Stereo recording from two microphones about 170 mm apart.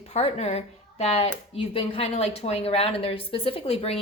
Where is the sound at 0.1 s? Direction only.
40° left (ahead or behind).